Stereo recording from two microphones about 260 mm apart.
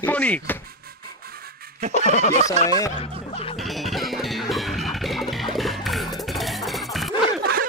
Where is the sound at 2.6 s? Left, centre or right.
Centre.